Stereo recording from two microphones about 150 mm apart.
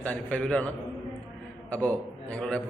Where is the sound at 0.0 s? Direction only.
10° left (ahead or behind).